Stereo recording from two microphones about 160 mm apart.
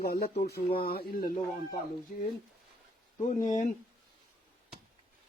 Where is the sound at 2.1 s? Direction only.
60° left (ahead or behind).